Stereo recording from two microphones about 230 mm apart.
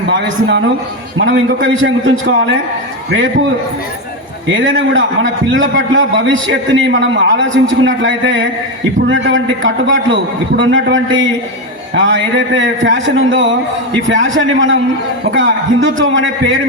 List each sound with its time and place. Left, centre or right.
0.1 s a man's voice: right
4.4 s a man's voice: right